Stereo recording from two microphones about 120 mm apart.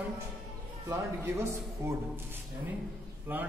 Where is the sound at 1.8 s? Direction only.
20° right (ahead or behind).